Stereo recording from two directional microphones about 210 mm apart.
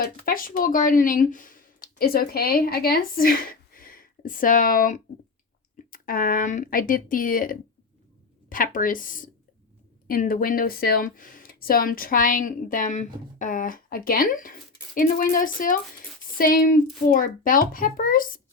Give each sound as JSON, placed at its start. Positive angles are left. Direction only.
{"t": 0.0, "sound": "speech", "side_deg": 45}